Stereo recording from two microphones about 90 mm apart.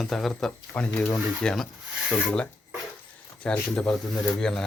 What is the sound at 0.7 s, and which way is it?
Rub, 15° left (ahead or behind).